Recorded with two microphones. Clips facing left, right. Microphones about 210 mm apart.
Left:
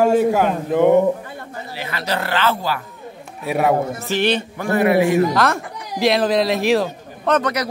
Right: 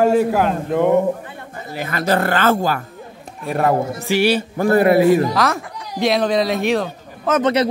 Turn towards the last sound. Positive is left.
turn(degrees=-25)  # may be behind; listen again after turning